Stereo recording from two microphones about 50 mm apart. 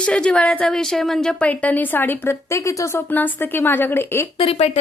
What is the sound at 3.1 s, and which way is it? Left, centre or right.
A woman's voice, left.